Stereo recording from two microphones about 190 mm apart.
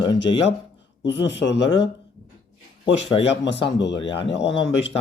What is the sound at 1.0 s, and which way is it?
Speech, 70° left (ahead or behind).